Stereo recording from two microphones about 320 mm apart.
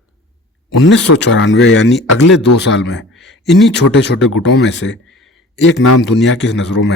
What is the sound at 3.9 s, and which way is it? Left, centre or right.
Speech, left.